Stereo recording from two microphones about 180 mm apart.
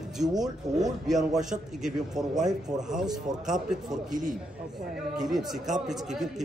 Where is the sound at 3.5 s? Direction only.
Centre (ahead or behind).